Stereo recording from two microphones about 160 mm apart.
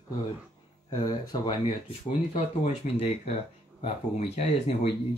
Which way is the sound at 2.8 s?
50° left (ahead or behind).